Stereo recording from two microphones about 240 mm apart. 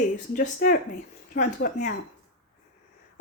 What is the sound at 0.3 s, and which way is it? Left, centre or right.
A woman's voice, left.